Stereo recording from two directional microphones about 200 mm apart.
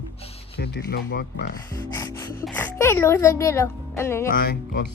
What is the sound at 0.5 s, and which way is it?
Speech, 55° left (ahead or behind).